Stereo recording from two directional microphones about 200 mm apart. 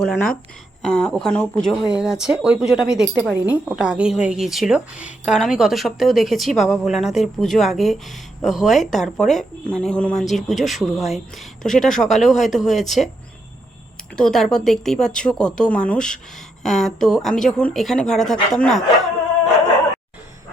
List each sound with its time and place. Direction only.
0.0 s speech: 5° left (ahead or behind)
14.2 s speech: centre (ahead or behind)